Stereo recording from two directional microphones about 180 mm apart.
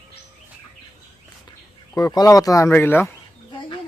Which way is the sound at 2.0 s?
20° left (ahead or behind).